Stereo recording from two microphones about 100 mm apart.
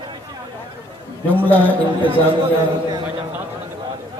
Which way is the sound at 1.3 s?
15° left (ahead or behind).